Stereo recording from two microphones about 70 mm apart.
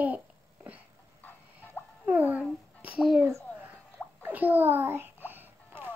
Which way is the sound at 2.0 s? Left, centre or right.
Right.